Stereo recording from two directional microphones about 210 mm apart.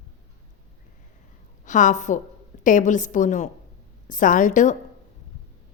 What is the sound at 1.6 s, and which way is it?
A woman's voice, 35° left (ahead or behind).